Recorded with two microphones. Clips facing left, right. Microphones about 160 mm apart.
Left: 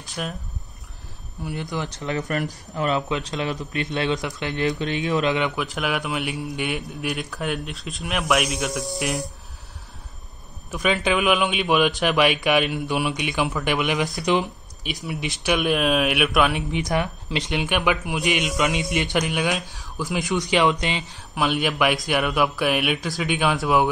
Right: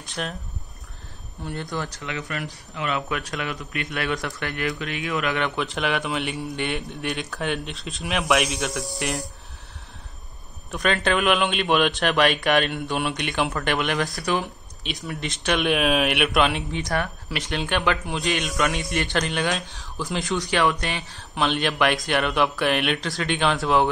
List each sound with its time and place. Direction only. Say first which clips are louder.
0.2 s speech: even; 5° left (ahead or behind)
1.4 s speech: left 1 dB; 10° left (ahead or behind)
2.0 s speech: left 6 dB; 40° left (ahead or behind)
3.1 s a man's voice: left 3 dB; 25° left (ahead or behind)
5.6 s speech: right 1 dB; 5° left (ahead or behind)
10.7 s speech: left 1 dB; 5° left (ahead or behind)
15.0 s speech: left 2 dB; 5° left (ahead or behind)
16.7 s speech: left 2 dB; 15° left (ahead or behind)
20.2 s speech: left 2 dB; 15° left (ahead or behind)